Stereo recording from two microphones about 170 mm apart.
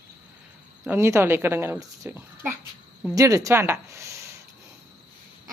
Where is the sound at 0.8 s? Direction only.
15° right (ahead or behind).